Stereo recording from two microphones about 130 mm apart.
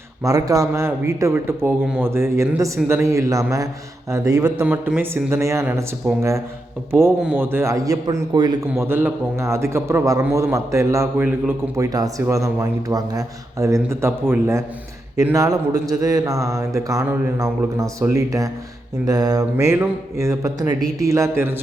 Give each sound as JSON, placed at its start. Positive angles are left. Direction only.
{"t": 0.2, "sound": "a man's voice", "side_deg": -25}
{"t": 4.6, "sound": "a man's voice", "side_deg": -10}
{"t": 7.2, "sound": "a man's voice", "side_deg": -10}
{"t": 8.7, "sound": "a man's voice", "side_deg": -20}